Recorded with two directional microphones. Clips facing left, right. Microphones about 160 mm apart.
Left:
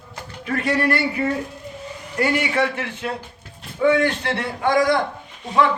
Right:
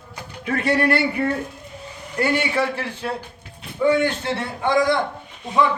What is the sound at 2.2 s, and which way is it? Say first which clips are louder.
A man's voice: even; 30° right (ahead or behind).